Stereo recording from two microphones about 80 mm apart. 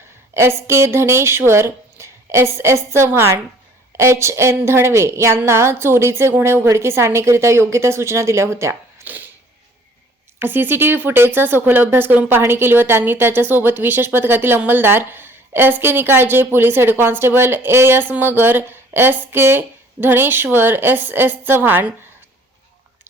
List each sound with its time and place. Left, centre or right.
0.3 s a woman's voice: right
9.0 s a sound: right
10.4 s a woman's voice: right